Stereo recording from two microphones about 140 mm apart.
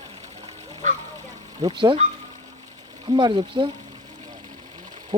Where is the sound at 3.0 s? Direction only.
35° right (ahead or behind).